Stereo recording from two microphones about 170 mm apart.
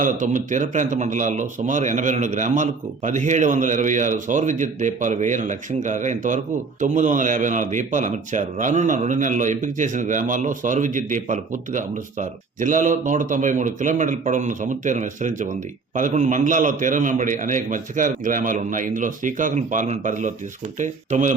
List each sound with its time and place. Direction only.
0.0 s speech: 50° right (ahead or behind)